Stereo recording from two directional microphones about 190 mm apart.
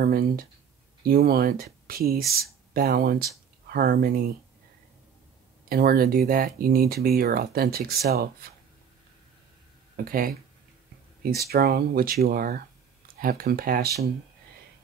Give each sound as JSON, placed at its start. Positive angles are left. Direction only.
{"t": 0.0, "sound": "speech", "side_deg": -55}
{"t": 5.7, "sound": "speech", "side_deg": -50}
{"t": 9.9, "sound": "speech", "side_deg": -50}
{"t": 11.5, "sound": "speech", "side_deg": -55}